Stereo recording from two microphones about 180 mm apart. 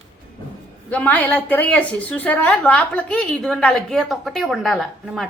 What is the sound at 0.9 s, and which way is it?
A woman's voice, 10° left (ahead or behind).